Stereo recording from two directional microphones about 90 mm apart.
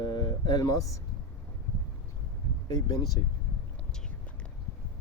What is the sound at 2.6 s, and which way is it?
Speech, 55° left (ahead or behind).